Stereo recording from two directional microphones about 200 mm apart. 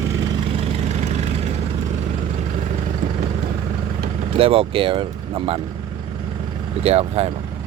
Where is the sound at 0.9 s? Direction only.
35° right (ahead or behind).